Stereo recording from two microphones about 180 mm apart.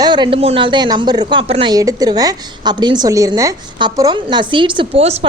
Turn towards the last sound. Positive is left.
turn(degrees=-35)  # may be behind; listen again after turning